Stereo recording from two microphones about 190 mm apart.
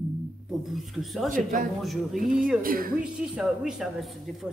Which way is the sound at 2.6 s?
50° right (ahead or behind).